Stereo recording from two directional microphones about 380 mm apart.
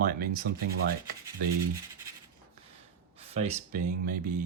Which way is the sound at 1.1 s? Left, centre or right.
Centre.